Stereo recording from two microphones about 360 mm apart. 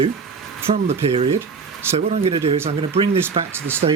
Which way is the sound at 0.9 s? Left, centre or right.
Centre.